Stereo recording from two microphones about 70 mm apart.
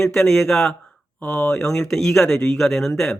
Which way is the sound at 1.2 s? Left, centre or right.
Left.